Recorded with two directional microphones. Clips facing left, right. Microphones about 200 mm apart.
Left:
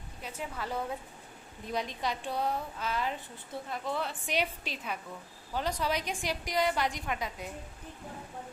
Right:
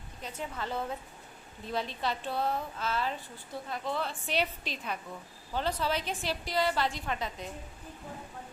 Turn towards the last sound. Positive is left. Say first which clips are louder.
# even
turn(degrees=10)  # may be behind; listen again after turning